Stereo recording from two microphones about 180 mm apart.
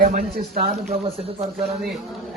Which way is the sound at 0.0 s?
55° right (ahead or behind).